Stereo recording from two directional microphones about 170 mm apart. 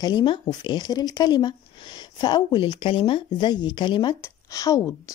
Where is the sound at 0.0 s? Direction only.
25° left (ahead or behind).